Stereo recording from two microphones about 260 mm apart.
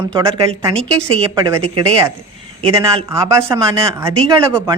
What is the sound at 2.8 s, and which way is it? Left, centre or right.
Speech, centre.